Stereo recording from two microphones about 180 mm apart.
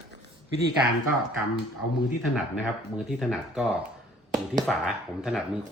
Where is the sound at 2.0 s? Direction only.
5° right (ahead or behind).